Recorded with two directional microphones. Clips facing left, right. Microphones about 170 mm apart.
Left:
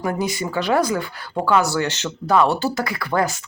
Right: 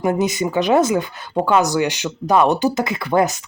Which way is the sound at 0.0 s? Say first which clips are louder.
Right 5 dB; 20° right (ahead or behind).